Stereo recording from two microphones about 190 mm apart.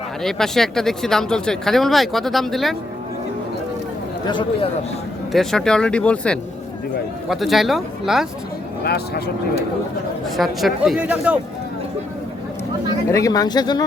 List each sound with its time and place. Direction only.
0.2 s speech: centre (ahead or behind)
4.3 s speech: 25° left (ahead or behind)
5.3 s speech: centre (ahead or behind)
8.8 s speech: 55° left (ahead or behind)
10.3 s speech: centre (ahead or behind)
13.1 s speech: 15° left (ahead or behind)